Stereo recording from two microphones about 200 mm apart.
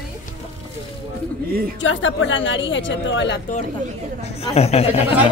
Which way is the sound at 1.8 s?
75° left (ahead or behind).